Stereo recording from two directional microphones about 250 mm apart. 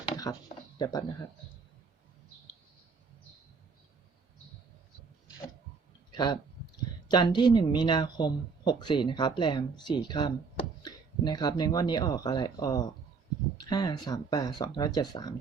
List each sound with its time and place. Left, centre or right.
0.8 s speech: centre
6.1 s speech: centre